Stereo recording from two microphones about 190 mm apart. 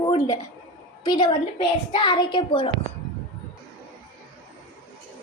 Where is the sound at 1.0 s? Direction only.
25° left (ahead or behind).